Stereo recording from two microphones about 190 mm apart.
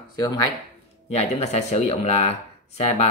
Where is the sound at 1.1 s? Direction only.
35° left (ahead or behind).